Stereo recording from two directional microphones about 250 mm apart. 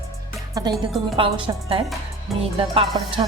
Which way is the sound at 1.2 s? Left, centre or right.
Centre.